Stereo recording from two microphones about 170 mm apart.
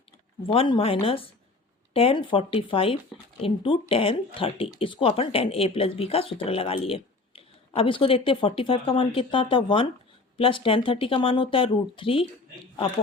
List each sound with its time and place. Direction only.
0.4 s speech: 35° left (ahead or behind)